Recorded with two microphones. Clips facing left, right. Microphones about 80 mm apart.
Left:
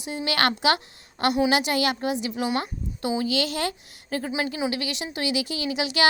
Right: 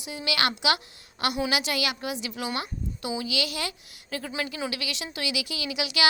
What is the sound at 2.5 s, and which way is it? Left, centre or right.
A woman's voice, left.